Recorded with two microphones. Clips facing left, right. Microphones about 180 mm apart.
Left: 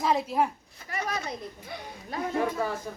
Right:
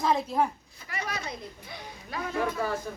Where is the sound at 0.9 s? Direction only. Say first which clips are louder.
Left 3 dB; 45° left (ahead or behind).